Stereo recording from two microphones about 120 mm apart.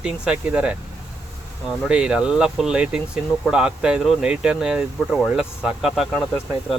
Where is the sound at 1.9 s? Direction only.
10° right (ahead or behind).